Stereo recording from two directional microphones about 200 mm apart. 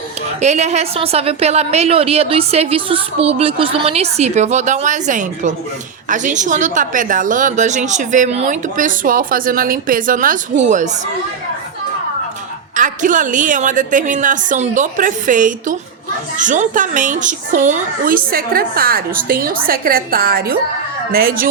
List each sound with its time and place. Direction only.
0.4 s a woman's voice: 35° right (ahead or behind)
12.7 s a woman's voice: 40° right (ahead or behind)